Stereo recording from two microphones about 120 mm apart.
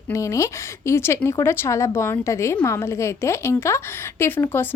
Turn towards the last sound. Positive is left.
turn(degrees=20)  # may be behind; listen again after turning